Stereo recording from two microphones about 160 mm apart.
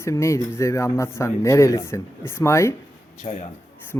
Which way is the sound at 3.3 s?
40° left (ahead or behind).